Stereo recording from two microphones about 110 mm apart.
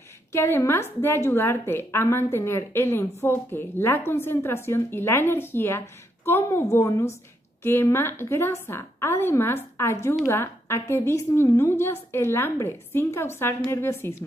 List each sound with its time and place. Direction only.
0.3 s a woman's voice: 25° left (ahead or behind)